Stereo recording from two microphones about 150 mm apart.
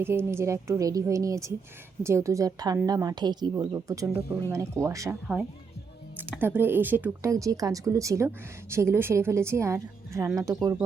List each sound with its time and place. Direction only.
0.0 s speech: 15° right (ahead or behind)
6.1 s speech: 10° right (ahead or behind)